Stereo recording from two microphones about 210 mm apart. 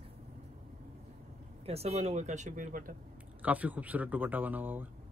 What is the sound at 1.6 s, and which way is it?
Speech, 30° right (ahead or behind).